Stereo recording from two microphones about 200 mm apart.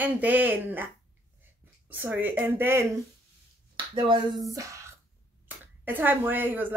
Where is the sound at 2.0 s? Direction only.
10° right (ahead or behind).